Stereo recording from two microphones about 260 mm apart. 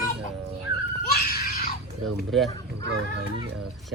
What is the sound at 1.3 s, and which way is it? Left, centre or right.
Screaming, left.